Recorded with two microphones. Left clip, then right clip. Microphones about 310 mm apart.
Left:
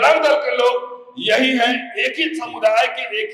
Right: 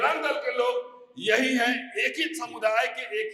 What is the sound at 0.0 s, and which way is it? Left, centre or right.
A man's voice, right.